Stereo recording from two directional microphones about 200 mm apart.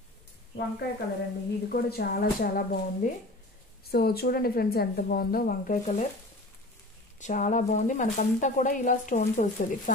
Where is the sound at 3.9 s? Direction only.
50° left (ahead or behind).